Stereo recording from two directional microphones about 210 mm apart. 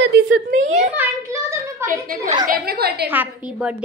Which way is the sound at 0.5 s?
35° right (ahead or behind).